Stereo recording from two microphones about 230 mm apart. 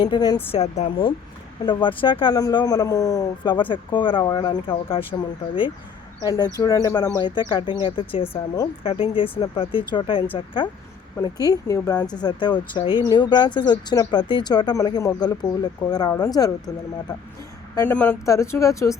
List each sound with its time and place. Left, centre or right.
0.0 s speech: centre
6.2 s speech: centre
17.7 s speech: centre